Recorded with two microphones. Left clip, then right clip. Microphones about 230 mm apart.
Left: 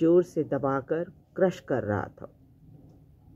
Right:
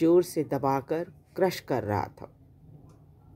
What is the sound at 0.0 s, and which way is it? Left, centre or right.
Speech, right.